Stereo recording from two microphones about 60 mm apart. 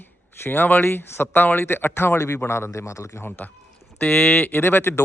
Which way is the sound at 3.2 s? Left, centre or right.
Left.